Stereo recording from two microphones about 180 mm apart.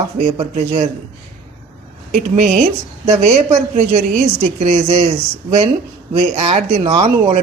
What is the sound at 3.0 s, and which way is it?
Speech, 40° right (ahead or behind).